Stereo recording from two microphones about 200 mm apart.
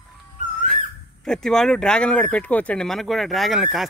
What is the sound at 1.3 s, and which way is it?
Speech, centre (ahead or behind).